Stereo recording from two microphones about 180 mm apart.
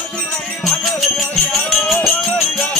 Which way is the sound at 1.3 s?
Centre (ahead or behind).